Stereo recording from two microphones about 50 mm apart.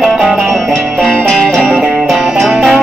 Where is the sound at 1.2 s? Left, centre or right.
Centre.